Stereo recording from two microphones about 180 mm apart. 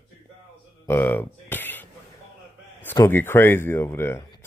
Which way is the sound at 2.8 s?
10° left (ahead or behind).